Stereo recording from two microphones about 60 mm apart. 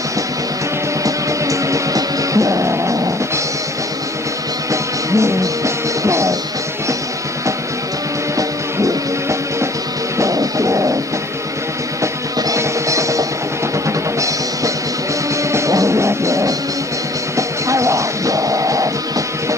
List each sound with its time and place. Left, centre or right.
1.0 s music: right
5.1 s music: right
8.4 s music: right
12.0 s music: right